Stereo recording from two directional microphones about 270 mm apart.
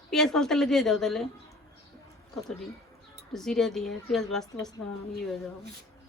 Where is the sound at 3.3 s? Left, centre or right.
Centre.